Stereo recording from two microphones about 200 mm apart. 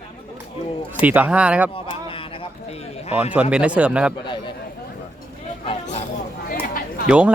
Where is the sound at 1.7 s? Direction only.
25° left (ahead or behind).